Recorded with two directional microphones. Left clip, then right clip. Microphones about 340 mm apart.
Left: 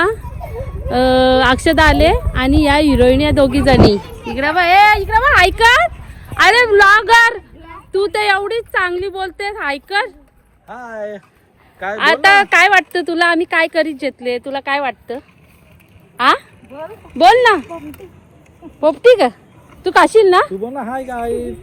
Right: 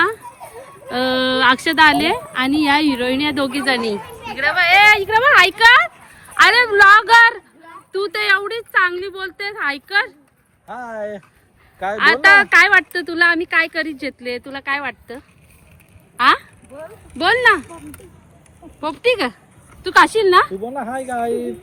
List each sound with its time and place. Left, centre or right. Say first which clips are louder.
0.9 s speech: left 7 dB; centre
10.7 s speech: left 1 dB; right
11.9 s speech: left 1 dB; centre
18.8 s speech: left 8 dB; centre
20.5 s speech: left 3 dB; left
20.9 s speech: right 1 dB; centre